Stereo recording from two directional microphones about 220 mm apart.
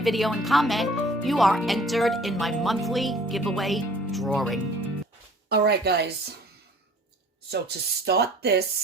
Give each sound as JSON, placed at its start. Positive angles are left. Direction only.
{"t": 0.0, "sound": "speech", "side_deg": 0}
{"t": 5.5, "sound": "speech", "side_deg": -45}
{"t": 7.5, "sound": "speech", "side_deg": -45}